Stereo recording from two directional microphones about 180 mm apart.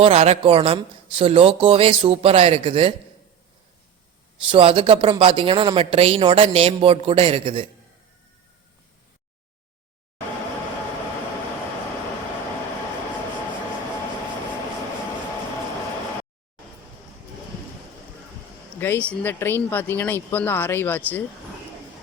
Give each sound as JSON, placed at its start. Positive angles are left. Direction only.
{"t": 0.0, "sound": "speech", "side_deg": -35}
{"t": 4.4, "sound": "speech", "side_deg": -30}
{"t": 18.8, "sound": "speech", "side_deg": 10}